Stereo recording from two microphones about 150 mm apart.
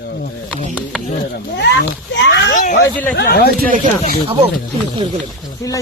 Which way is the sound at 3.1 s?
90° left.